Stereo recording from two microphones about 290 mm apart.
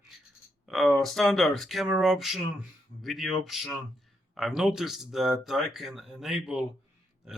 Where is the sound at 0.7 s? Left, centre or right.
Centre.